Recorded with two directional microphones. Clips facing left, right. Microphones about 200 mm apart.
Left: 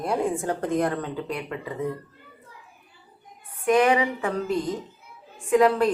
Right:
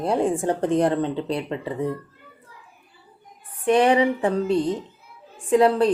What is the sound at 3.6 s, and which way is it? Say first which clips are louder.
A woman's voice: right 3 dB; 30° right (ahead or behind).